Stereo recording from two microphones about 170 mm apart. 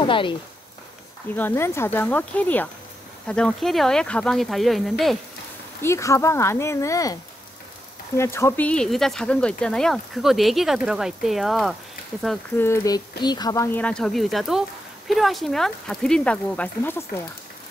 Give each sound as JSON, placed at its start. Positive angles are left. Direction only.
{"t": 0.0, "sound": "speech", "side_deg": 30}
{"t": 1.3, "sound": "speech", "side_deg": 15}
{"t": 5.8, "sound": "speech", "side_deg": 15}
{"t": 8.2, "sound": "speech", "side_deg": 15}
{"t": 12.5, "sound": "speech", "side_deg": 15}